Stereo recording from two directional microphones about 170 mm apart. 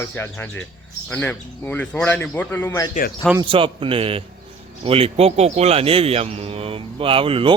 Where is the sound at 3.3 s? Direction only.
30° right (ahead or behind).